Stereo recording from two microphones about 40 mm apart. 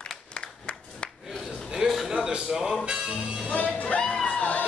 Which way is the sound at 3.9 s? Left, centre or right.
Left.